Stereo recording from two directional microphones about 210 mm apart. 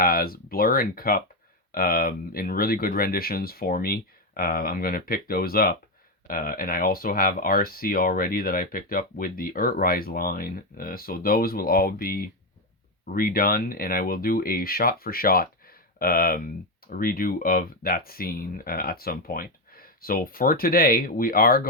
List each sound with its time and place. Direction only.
0.0 s speech: 45° left (ahead or behind)